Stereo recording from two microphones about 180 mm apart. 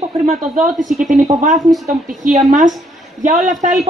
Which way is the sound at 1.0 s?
45° right (ahead or behind).